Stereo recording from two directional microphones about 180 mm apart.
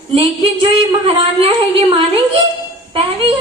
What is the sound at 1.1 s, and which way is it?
Speech, 30° right (ahead or behind).